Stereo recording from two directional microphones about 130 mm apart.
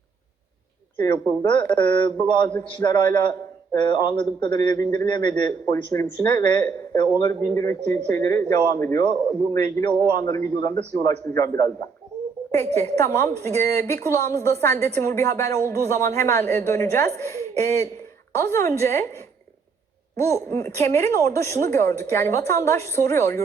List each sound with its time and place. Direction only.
0.9 s a man's voice: 30° left (ahead or behind)
20.1 s a woman's voice: 20° left (ahead or behind)